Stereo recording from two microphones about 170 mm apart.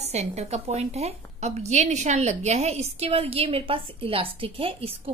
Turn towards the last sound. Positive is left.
turn(degrees=-35)  # may be behind; listen again after turning